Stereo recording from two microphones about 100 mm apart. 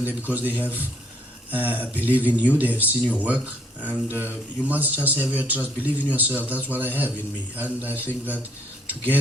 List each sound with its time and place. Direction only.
0.0 s speech: 15° right (ahead or behind)